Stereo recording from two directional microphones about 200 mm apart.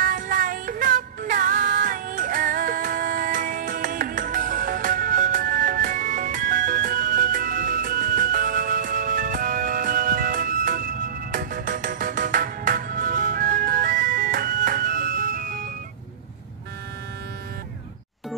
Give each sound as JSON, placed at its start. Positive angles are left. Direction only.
{"t": 0.0, "sound": "music", "side_deg": -45}